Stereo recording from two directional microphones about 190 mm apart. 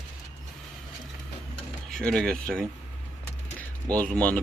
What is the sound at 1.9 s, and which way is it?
Speech, 5° left (ahead or behind).